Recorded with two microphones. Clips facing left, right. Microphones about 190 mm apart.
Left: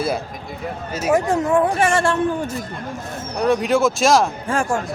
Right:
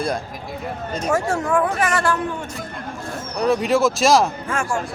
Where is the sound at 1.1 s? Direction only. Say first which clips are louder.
Left 3 dB; 20° left (ahead or behind).